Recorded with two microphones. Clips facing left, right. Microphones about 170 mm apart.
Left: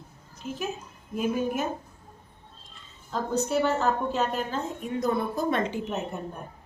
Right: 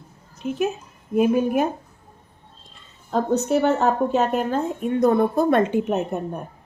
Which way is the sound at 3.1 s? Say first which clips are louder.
Right 7 dB; 55° right (ahead or behind).